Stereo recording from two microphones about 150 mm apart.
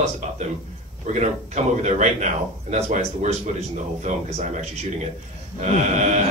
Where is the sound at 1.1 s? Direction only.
50° right (ahead or behind).